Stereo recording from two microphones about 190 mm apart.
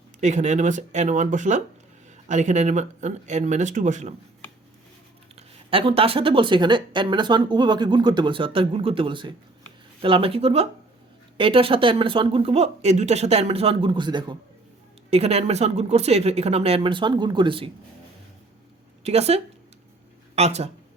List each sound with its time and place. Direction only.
0.2 s speech: 40° right (ahead or behind)
5.7 s speech: 30° right (ahead or behind)
19.0 s speech: 35° right (ahead or behind)